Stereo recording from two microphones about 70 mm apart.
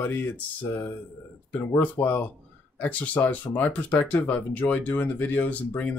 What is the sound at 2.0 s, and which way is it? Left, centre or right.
Speech, left.